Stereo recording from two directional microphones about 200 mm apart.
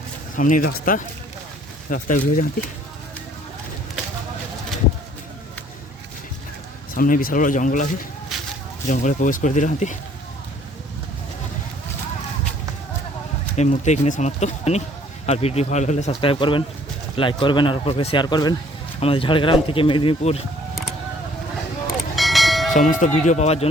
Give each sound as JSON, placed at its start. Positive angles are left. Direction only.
{"t": 0.3, "sound": "speech", "side_deg": 40}
{"t": 1.9, "sound": "speech", "side_deg": 40}
{"t": 6.9, "sound": "speech", "side_deg": 45}
{"t": 8.3, "sound": "a sound", "side_deg": 0}
{"t": 8.9, "sound": "speech", "side_deg": 40}
{"t": 13.6, "sound": "speech", "side_deg": 35}
{"t": 21.8, "sound": "church bell", "side_deg": 0}
{"t": 22.9, "sound": "speech", "side_deg": 40}